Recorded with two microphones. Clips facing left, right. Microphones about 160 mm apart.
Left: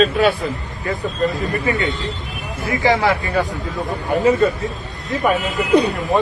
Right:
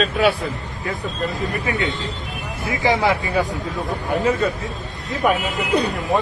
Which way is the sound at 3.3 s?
Centre (ahead or behind).